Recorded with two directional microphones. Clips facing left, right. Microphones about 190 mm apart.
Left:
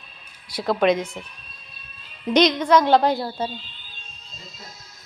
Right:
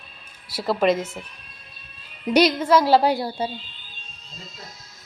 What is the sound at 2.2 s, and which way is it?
A woman's voice, 10° right (ahead or behind).